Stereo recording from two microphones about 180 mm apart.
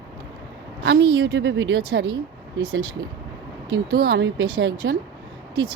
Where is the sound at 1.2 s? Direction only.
80° right.